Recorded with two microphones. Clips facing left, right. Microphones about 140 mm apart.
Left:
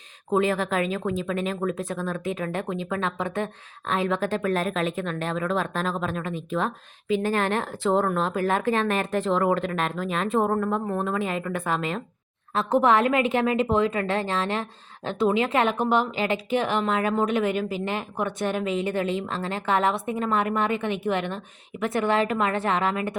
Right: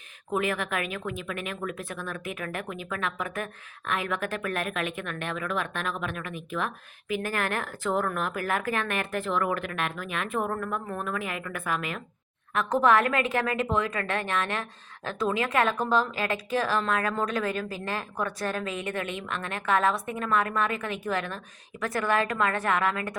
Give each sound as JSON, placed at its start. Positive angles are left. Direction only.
{"t": 0.3, "sound": "a woman's voice", "side_deg": 30}